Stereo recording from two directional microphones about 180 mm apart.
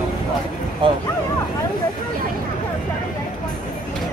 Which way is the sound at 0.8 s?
30° right (ahead or behind).